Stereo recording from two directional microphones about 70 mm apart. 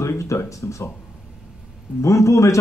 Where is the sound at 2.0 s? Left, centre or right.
Left.